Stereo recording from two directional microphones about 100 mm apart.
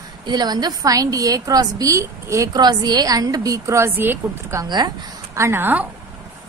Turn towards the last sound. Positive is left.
turn(degrees=-20)  # may be behind; listen again after turning